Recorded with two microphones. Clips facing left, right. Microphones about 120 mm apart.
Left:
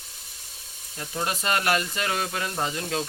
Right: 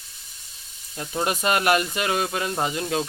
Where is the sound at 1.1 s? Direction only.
20° right (ahead or behind).